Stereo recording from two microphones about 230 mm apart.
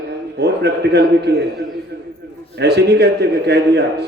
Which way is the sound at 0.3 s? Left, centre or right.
Right.